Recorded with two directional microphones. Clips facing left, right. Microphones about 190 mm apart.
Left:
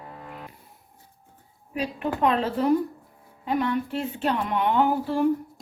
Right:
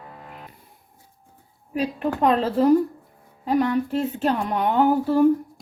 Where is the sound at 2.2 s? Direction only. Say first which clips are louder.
Right 4 dB; 40° right (ahead or behind).